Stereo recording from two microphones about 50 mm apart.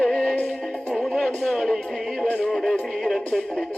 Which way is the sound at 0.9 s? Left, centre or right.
Centre.